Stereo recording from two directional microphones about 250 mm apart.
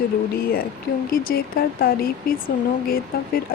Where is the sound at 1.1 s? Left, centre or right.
Left.